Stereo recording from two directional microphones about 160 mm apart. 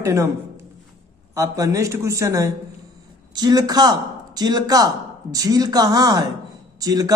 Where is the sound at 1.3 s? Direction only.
20° right (ahead or behind).